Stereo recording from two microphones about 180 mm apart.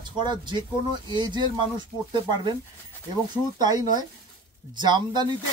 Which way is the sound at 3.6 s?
20° right (ahead or behind).